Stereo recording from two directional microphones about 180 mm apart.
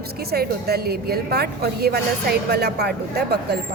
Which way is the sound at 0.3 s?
60° right (ahead or behind).